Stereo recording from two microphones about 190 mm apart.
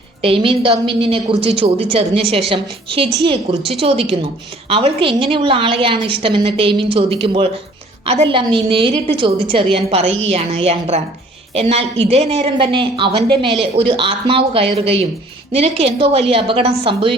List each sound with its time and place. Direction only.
0.2 s a woman's voice: 30° right (ahead or behind)